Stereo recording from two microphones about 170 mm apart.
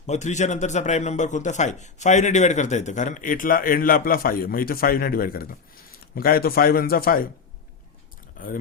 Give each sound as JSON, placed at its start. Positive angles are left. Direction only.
{"t": 0.0, "sound": "a man's voice", "side_deg": 45}
{"t": 8.4, "sound": "speech", "side_deg": 55}